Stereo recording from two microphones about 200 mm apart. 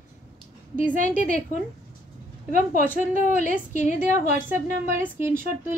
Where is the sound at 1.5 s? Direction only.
40° left (ahead or behind).